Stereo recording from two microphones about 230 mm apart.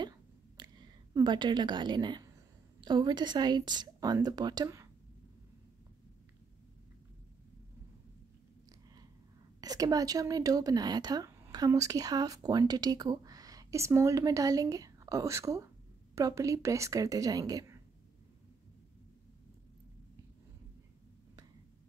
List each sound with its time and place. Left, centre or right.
0.6 s a woman's voice: centre
9.6 s a woman's voice: centre